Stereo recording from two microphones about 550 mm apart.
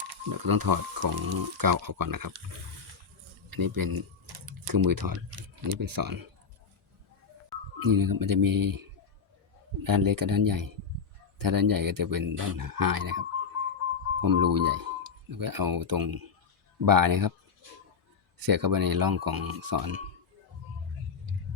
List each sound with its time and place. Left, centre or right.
0.0 s speech: right
3.5 s speech: right
7.8 s speech: right
9.8 s speech: right
18.4 s speech: right